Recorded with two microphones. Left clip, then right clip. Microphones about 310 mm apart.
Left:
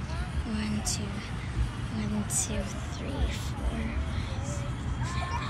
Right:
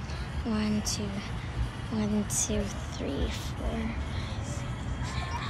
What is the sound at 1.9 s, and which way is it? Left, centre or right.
Speech, centre.